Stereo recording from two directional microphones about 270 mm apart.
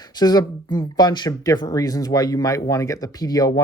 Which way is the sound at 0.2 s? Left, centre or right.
Centre.